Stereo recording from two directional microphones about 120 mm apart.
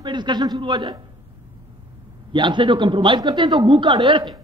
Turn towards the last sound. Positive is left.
turn(degrees=-40)  # may be behind; listen again after turning